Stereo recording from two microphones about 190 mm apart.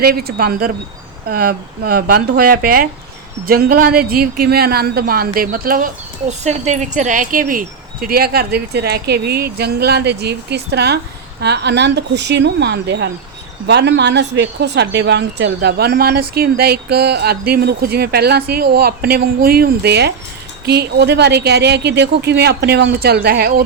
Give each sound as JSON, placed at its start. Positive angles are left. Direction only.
{"t": 0.0, "sound": "a woman's voice", "side_deg": -55}